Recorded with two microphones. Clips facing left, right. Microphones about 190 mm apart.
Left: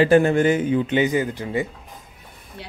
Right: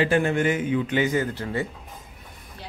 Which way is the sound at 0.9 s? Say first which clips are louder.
Left 3 dB; 15° left (ahead or behind).